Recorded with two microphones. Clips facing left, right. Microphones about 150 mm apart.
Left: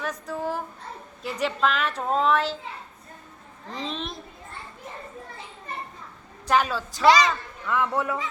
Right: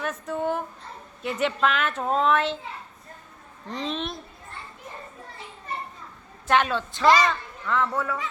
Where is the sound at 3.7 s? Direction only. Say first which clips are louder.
Right 2 dB; centre (ahead or behind).